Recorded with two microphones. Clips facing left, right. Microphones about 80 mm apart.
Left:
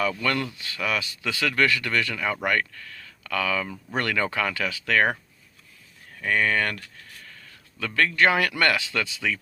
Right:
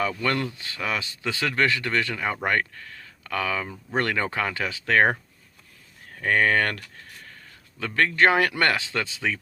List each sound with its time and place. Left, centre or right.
0.0 s speech: right
6.1 s speech: right
7.8 s speech: right